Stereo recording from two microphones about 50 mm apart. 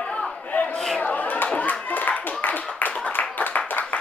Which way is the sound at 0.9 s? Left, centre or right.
Left.